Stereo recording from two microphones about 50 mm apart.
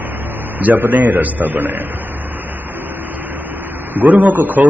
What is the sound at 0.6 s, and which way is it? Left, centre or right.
A man's voice, right.